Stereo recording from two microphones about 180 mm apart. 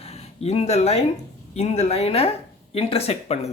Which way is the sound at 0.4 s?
35° left (ahead or behind).